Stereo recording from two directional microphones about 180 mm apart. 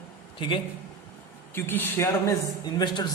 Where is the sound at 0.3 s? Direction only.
30° left (ahead or behind).